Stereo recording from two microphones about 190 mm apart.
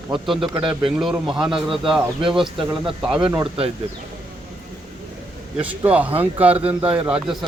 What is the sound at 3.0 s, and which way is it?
Speech, 5° right (ahead or behind).